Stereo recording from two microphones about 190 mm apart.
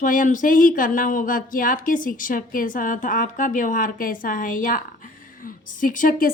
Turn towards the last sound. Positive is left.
turn(degrees=50)  # may be behind; listen again after turning